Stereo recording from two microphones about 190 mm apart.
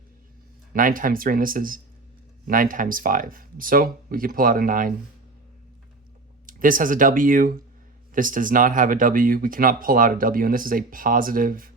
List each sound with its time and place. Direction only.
0.7 s speech: 45° right (ahead or behind)
6.4 s speech: 45° right (ahead or behind)